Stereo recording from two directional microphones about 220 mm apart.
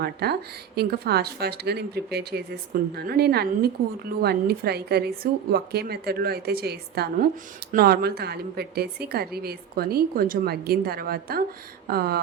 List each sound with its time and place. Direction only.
0.0 s a woman's voice: 45° right (ahead or behind)